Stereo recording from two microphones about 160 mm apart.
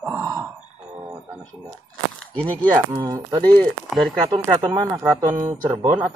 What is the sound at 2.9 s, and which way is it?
Speech, 25° right (ahead or behind).